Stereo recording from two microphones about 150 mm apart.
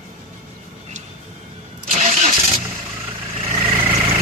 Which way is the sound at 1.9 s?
55° right (ahead or behind).